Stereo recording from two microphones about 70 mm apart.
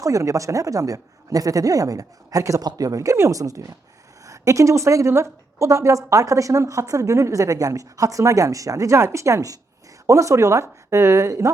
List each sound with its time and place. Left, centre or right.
0.0 s a woman's voice: right